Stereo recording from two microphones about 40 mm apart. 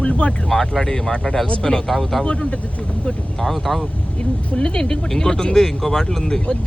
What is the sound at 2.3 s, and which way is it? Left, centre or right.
Speech, left.